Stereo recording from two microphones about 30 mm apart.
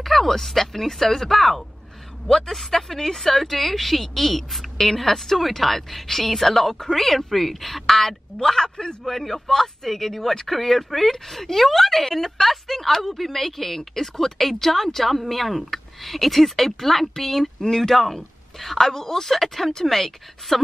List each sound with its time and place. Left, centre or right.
0.0 s speech: centre
2.2 s speech: centre
2.5 s a woman's voice: centre
8.4 s speech: centre
9.0 s speech: centre